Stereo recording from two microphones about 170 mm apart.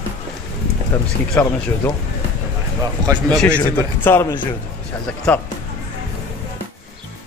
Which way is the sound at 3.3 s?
5° left (ahead or behind).